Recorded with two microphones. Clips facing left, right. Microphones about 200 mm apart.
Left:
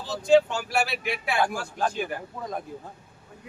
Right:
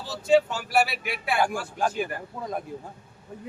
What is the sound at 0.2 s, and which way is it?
Speech, 5° right (ahead or behind).